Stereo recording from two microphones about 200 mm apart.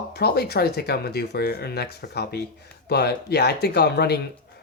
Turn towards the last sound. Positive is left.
turn(degrees=55)  # may be behind; listen again after turning